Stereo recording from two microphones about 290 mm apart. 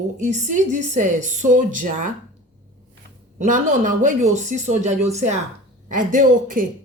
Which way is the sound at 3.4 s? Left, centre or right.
Right.